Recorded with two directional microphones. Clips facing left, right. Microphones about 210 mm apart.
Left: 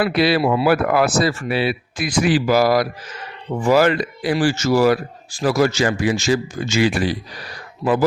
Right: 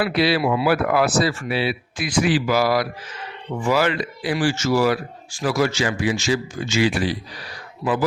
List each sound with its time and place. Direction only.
0.0 s speech: 50° left (ahead or behind)